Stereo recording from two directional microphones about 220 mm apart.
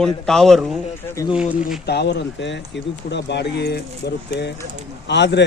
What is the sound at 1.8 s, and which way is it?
Speech, 50° left (ahead or behind).